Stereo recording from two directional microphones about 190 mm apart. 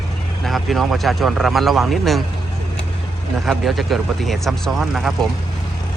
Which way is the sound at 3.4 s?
Centre (ahead or behind).